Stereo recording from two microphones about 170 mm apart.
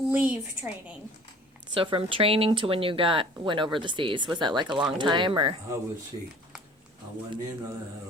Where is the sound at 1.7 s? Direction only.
30° right (ahead or behind).